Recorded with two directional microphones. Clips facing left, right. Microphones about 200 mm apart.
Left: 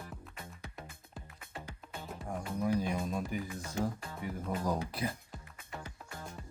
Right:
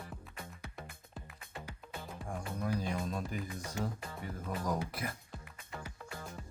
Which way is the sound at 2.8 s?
10° left (ahead or behind).